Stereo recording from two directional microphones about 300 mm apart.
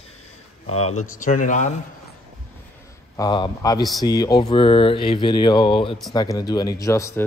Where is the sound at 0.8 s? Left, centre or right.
Left.